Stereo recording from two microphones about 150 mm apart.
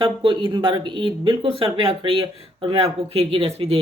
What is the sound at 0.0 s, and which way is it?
Speech, 35° right (ahead or behind).